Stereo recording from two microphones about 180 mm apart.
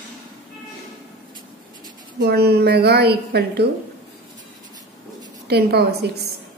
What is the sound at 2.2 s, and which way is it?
A woman's voice, 65° right (ahead or behind).